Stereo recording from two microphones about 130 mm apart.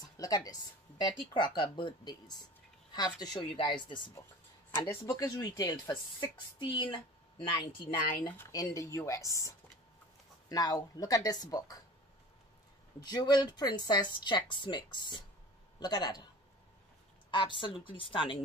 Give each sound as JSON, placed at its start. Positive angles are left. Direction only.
{"t": 0.2, "sound": "speech", "side_deg": 30}
{"t": 4.6, "sound": "speech", "side_deg": 20}
{"t": 13.0, "sound": "speech", "side_deg": 35}
{"t": 17.3, "sound": "speech", "side_deg": 40}